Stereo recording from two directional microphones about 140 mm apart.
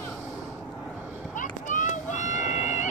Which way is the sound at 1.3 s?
65° left (ahead or behind).